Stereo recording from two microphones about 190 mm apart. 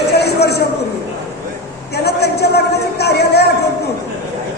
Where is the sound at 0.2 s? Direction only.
60° left (ahead or behind).